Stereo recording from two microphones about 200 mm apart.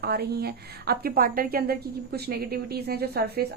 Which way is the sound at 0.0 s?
50° right (ahead or behind).